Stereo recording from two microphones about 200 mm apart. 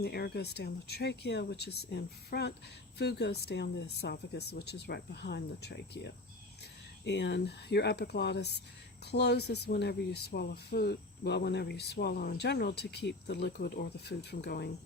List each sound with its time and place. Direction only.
0.0 s speech: 55° left (ahead or behind)